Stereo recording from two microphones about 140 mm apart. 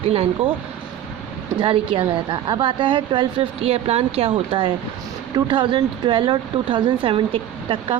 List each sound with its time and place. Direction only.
0.1 s speech: 45° right (ahead or behind)
1.5 s a woman's voice: 35° right (ahead or behind)